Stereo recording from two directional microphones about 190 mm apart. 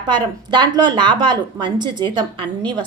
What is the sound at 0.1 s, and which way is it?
A woman's voice, 25° right (ahead or behind).